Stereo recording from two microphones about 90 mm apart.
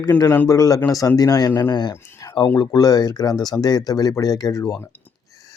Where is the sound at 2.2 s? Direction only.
45° left (ahead or behind).